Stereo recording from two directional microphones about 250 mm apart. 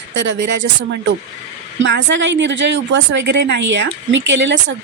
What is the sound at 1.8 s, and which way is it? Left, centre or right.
A woman's voice, right.